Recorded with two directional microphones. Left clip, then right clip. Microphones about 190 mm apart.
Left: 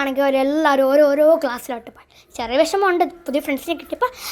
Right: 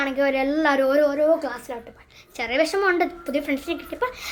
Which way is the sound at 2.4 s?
30° left (ahead or behind).